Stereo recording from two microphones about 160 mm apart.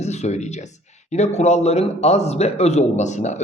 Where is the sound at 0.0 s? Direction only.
45° left (ahead or behind).